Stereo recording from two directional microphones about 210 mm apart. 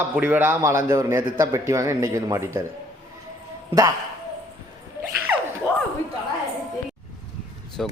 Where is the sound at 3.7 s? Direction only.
20° right (ahead or behind).